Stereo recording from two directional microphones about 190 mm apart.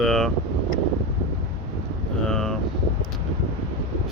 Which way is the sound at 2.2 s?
5° left (ahead or behind).